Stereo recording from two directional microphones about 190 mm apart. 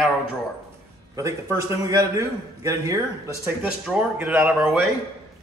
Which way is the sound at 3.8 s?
5° right (ahead or behind).